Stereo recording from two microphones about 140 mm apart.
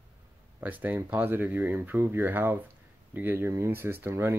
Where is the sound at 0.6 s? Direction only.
10° right (ahead or behind).